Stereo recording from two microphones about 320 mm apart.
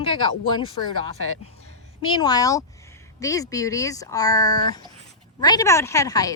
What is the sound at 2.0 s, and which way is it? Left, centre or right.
Speech, centre.